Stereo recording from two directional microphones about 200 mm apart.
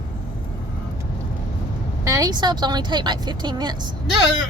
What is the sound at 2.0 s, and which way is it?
A woman's voice, 15° right (ahead or behind).